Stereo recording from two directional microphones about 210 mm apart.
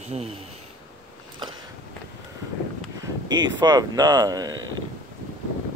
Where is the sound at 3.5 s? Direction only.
20° right (ahead or behind).